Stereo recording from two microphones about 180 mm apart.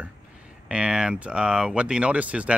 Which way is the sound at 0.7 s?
5° right (ahead or behind).